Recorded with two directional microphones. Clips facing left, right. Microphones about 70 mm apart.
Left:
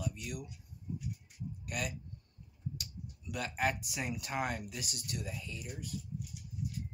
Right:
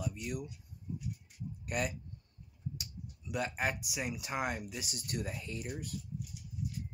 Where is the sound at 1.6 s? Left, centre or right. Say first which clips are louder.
Right 4 dB; right.